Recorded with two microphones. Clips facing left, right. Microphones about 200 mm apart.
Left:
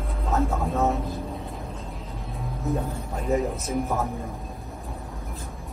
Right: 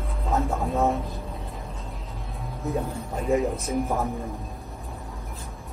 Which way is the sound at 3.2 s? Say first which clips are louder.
Right 1 dB; centre (ahead or behind).